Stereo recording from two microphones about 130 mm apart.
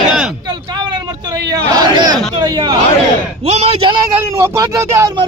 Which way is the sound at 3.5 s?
50° right (ahead or behind).